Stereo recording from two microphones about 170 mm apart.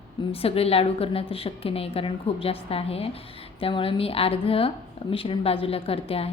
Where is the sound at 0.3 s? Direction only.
35° left (ahead or behind).